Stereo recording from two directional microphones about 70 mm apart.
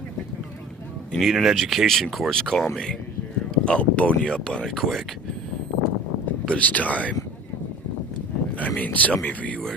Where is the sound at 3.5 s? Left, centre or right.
Centre.